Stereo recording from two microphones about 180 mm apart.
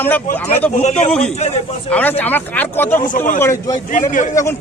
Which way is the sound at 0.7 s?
40° left (ahead or behind).